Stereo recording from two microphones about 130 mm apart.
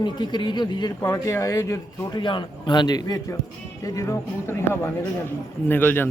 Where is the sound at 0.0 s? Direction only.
35° left (ahead or behind).